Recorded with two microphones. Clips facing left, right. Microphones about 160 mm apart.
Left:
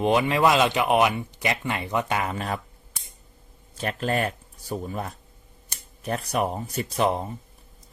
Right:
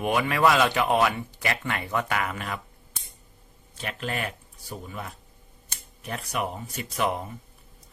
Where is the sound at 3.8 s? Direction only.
40° left (ahead or behind).